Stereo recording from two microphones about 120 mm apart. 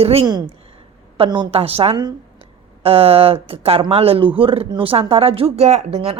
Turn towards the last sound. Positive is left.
turn(degrees=-55)  # may be behind; listen again after turning